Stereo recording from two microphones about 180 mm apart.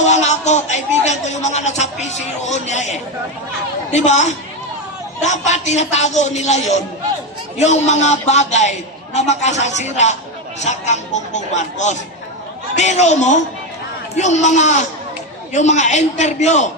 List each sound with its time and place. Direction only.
0.0 s a man's voice: 40° left (ahead or behind)
3.9 s a man's voice: 40° left (ahead or behind)